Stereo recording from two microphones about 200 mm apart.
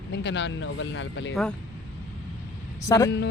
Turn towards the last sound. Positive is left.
turn(degrees=15)  # may be behind; listen again after turning